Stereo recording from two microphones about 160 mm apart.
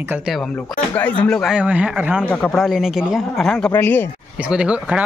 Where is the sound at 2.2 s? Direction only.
5° left (ahead or behind).